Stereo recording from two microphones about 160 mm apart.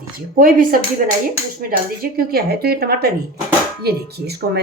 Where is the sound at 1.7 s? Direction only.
70° right (ahead or behind).